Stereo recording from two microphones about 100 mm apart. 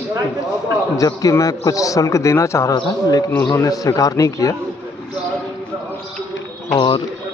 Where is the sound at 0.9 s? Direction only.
35° left (ahead or behind).